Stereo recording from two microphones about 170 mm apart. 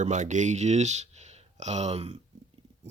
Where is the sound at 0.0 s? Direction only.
45° right (ahead or behind).